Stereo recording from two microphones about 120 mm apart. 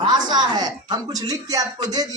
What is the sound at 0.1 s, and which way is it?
A woman's voice, 35° right (ahead or behind).